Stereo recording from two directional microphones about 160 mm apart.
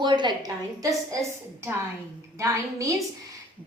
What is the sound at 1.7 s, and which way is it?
A woman's voice, 15° right (ahead or behind).